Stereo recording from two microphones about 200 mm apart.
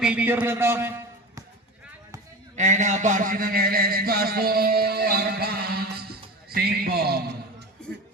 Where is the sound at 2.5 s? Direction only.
35° right (ahead or behind); by 7.7 s 50° right (ahead or behind).